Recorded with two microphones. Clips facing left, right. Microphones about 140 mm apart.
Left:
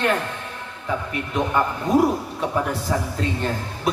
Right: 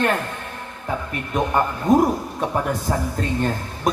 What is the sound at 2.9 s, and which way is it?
Speech, 40° right (ahead or behind).